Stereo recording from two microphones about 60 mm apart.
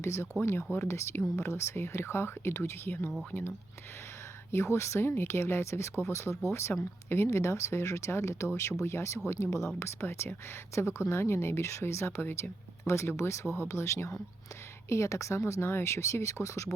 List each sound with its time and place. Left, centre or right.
0.0 s speech: left
4.5 s speech: left